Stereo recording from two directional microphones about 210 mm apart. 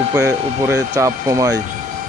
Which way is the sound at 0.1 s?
15° right (ahead or behind).